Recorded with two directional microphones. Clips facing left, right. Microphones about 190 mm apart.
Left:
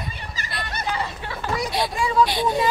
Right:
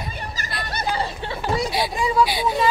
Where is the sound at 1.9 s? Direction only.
20° right (ahead or behind).